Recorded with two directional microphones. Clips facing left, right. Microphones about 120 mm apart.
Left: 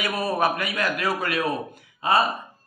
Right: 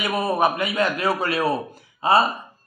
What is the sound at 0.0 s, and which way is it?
A man's voice, 20° right (ahead or behind).